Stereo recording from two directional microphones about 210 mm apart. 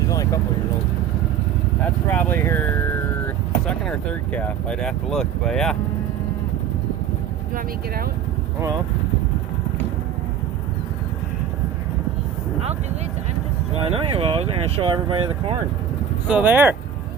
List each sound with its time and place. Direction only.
0.1 s vehicle: 15° left (ahead or behind)
1.8 s speech: 10° left (ahead or behind)
13.8 s speech: 25° right (ahead or behind)
16.3 s speech: 10° right (ahead or behind)